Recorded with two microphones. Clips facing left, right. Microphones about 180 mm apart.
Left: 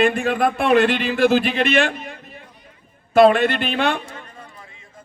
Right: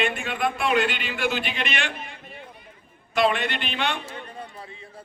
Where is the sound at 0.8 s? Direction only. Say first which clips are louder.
Left 9 dB; 40° left (ahead or behind).